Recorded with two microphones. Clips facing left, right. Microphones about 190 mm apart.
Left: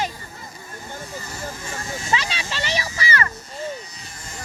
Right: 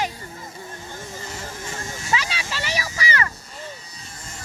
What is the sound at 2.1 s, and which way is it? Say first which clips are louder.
Music: even; 10° right (ahead or behind).